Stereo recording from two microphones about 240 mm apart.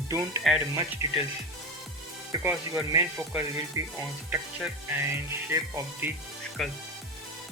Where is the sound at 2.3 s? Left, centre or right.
Centre.